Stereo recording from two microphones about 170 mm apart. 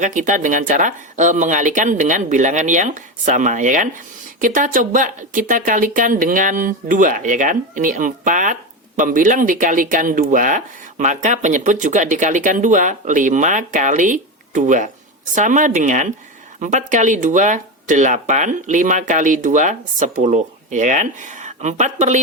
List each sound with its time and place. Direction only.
0.0 s speech: 50° right (ahead or behind)